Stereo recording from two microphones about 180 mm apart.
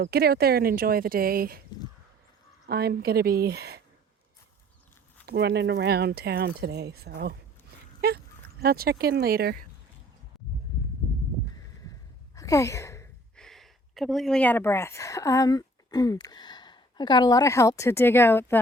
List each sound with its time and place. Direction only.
0.0 s speech: 60° right (ahead or behind)
2.6 s speech: 60° right (ahead or behind)
5.2 s speech: 65° right (ahead or behind)
11.9 s sigh: 15° left (ahead or behind)
13.3 s speech: centre (ahead or behind)